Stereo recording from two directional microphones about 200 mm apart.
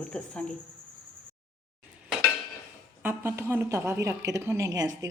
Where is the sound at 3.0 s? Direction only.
10° right (ahead or behind).